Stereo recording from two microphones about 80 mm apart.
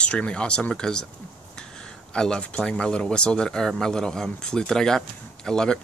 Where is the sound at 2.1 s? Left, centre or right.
Centre.